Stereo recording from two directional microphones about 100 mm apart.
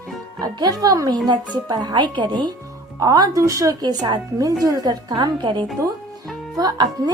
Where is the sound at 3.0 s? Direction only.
40° right (ahead or behind).